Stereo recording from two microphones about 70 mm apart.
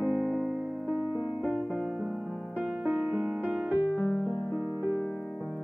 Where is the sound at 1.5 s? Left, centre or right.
Centre.